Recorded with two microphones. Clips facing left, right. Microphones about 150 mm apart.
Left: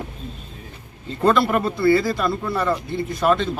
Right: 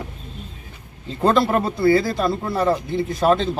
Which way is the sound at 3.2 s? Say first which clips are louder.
Right 1 dB; 35° right (ahead or behind).